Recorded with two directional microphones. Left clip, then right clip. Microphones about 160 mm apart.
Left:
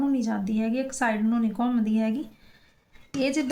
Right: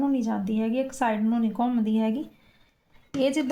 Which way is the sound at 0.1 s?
20° right (ahead or behind).